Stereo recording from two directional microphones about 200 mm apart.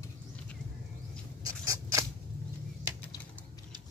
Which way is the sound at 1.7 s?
15° right (ahead or behind).